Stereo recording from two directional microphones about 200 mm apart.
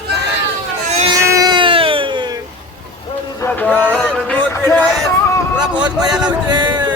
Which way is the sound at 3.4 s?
10° left (ahead or behind).